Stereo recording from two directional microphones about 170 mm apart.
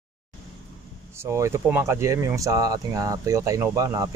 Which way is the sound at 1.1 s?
15° right (ahead or behind).